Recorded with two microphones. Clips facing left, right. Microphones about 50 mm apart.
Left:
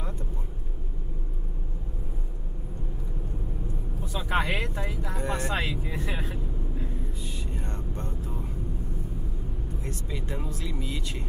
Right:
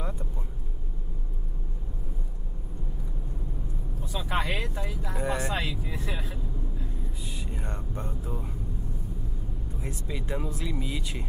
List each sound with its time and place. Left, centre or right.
4.1 s speech: centre
5.1 s speech: centre
5.7 s speech: left
6.0 s speech: centre
7.2 s vehicle: centre
9.8 s speech: centre